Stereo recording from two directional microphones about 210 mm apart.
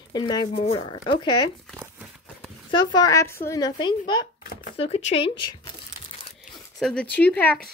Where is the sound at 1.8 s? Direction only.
5° right (ahead or behind).